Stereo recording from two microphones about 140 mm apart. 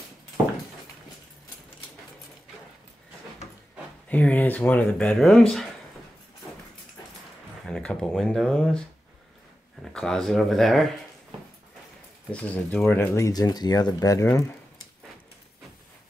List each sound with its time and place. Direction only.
4.1 s speech: 10° left (ahead or behind)
7.6 s speech: 5° left (ahead or behind)
12.3 s speech: 5° left (ahead or behind); by 14.4 s 25° left (ahead or behind)